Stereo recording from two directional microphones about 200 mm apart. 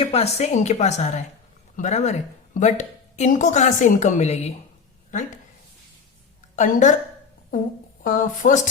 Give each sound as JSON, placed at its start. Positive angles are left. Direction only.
{"t": 0.0, "sound": "a woman's voice", "side_deg": 30}
{"t": 6.6, "sound": "a woman's voice", "side_deg": 40}
{"t": 8.0, "sound": "a woman's voice", "side_deg": 40}